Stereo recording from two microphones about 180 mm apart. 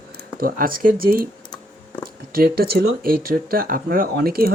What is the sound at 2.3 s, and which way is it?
Speech, 55° right (ahead or behind).